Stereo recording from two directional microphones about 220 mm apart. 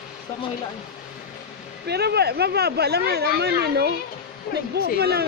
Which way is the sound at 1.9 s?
45° right (ahead or behind).